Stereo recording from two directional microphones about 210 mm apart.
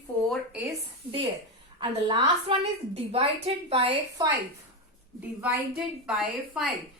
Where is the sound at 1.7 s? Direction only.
20° right (ahead or behind).